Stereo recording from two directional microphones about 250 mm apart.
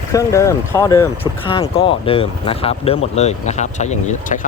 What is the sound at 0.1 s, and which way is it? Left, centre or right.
Speech, centre.